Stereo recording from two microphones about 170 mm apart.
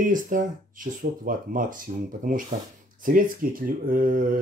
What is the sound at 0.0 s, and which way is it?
Speech, 50° right (ahead or behind).